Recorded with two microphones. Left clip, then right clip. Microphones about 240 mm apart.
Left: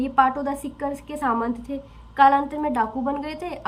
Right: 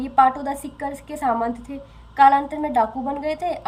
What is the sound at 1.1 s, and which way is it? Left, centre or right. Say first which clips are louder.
Speech: right 3 dB; left.